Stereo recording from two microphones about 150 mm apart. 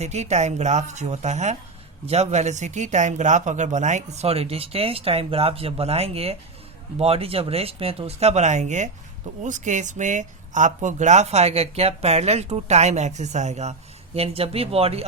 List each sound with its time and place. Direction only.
0.0 s speech: 50° right (ahead or behind)